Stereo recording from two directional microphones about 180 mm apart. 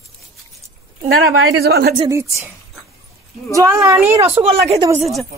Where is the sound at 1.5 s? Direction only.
60° right (ahead or behind).